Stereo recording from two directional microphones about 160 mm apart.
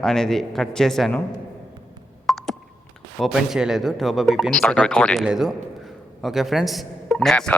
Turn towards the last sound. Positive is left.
turn(degrees=5)  # may be behind; listen again after turning